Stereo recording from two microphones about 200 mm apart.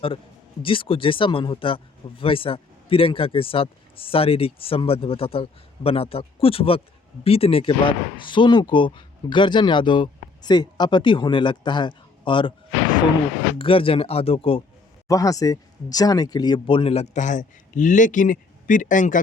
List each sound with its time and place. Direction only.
0.6 s speech: 25° left (ahead or behind)
13.6 s speech: 25° left (ahead or behind)
15.0 s speech: 15° left (ahead or behind); by 19.2 s 40° left (ahead or behind)